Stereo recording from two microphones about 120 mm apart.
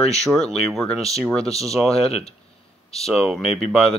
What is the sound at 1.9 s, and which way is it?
Speech, 55° left (ahead or behind).